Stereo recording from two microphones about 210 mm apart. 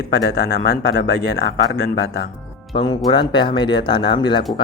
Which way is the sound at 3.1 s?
20° left (ahead or behind).